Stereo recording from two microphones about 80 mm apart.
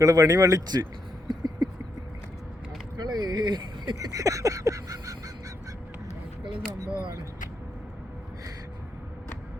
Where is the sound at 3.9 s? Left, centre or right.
Right.